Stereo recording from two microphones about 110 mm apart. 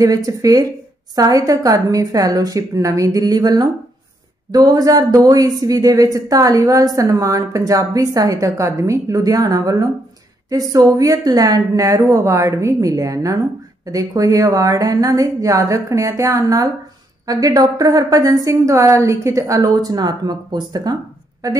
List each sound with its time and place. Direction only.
0.0 s a woman's voice: 30° right (ahead or behind)